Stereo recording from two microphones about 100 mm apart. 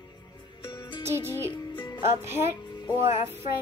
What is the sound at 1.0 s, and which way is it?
A child's voice, 25° right (ahead or behind).